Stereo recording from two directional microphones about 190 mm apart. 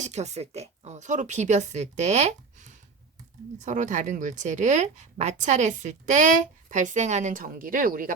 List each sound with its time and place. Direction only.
0.0 s speech: 35° right (ahead or behind)